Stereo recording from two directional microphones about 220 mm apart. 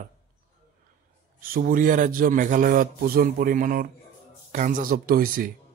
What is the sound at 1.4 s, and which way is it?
A man's voice, 40° right (ahead or behind).